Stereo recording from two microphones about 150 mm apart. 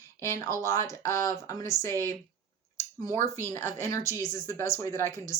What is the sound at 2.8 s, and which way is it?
Speech, 15° left (ahead or behind).